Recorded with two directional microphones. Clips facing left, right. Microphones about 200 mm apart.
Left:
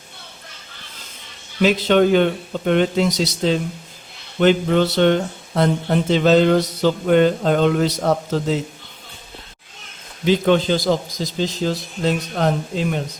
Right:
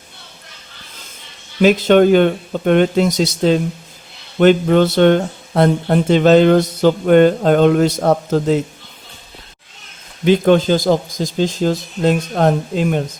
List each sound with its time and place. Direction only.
1.6 s speech: 50° right (ahead or behind)
10.2 s speech: 50° right (ahead or behind)